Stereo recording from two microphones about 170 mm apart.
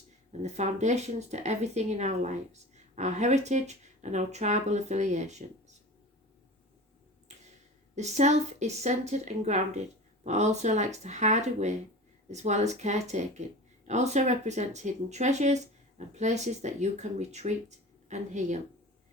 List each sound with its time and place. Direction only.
0.4 s speech: 40° right (ahead or behind)
7.9 s speech: 40° right (ahead or behind)